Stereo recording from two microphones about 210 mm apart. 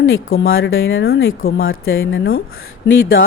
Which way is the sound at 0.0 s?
70° left (ahead or behind).